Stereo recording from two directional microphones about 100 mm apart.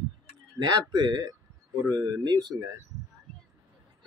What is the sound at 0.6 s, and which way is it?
Speech, 45° right (ahead or behind).